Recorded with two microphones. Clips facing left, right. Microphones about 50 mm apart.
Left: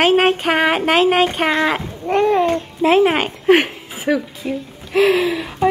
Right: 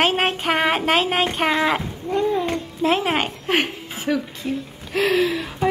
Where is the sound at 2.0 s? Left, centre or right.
Left.